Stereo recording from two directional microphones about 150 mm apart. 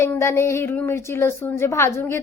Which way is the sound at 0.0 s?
15° left (ahead or behind).